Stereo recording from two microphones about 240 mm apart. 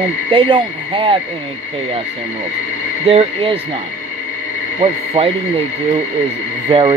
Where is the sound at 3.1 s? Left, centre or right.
Right.